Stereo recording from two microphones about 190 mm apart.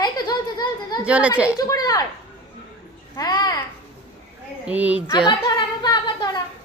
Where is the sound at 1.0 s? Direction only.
5° right (ahead or behind).